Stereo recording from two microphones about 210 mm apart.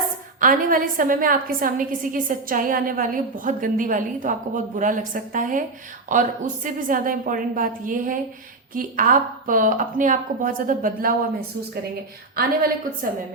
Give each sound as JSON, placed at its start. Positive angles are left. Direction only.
{"t": 0.3, "sound": "a woman's voice", "side_deg": -40}